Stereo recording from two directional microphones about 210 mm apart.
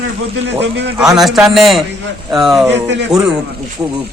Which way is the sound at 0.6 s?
55° right (ahead or behind).